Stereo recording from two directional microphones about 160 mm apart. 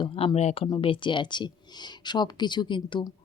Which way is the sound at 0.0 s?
35° left (ahead or behind).